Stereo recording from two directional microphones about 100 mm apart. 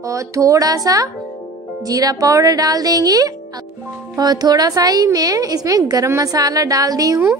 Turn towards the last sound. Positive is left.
turn(degrees=-40)  # may be behind; listen again after turning